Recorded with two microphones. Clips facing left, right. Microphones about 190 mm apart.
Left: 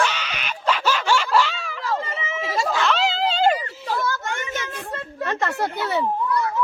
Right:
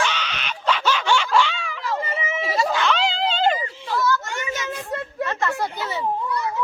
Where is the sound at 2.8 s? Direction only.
Centre (ahead or behind).